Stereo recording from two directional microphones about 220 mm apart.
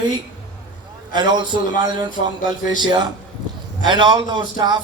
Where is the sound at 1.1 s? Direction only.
20° right (ahead or behind).